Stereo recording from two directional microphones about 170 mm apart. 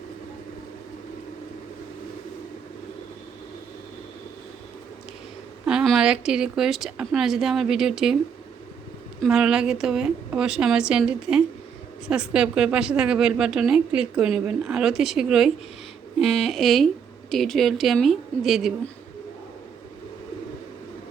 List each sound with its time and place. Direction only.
5.6 s a woman's voice: centre (ahead or behind)
9.2 s a woman's voice: 5° right (ahead or behind)